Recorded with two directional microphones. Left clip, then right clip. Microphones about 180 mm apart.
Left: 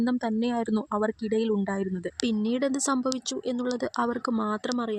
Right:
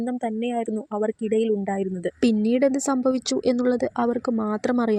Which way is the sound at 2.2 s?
25° right (ahead or behind).